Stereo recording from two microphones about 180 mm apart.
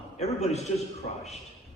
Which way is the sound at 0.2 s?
35° left (ahead or behind).